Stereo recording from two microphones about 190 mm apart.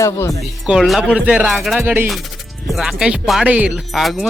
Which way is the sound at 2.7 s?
5° right (ahead or behind).